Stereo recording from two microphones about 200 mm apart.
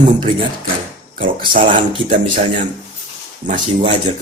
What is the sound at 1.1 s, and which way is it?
Speech, 45° right (ahead or behind).